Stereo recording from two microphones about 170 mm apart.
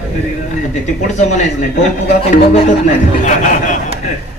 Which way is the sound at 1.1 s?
45° left (ahead or behind).